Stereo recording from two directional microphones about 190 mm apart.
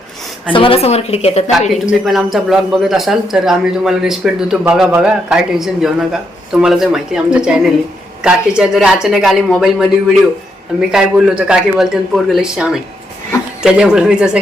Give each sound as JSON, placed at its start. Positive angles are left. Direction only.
{"t": 0.5, "sound": "a woman's voice", "side_deg": 30}
{"t": 1.7, "sound": "speech", "side_deg": 0}